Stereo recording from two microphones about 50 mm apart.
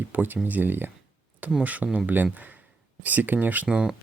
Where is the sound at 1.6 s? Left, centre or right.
Right.